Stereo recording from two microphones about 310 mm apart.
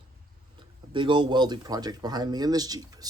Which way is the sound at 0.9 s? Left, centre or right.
Centre.